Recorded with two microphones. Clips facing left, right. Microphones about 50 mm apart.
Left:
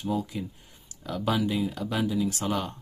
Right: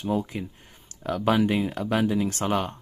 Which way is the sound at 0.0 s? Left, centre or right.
Right.